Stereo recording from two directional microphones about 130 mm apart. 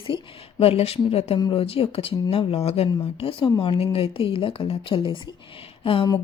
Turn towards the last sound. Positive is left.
turn(degrees=45)  # may be behind; listen again after turning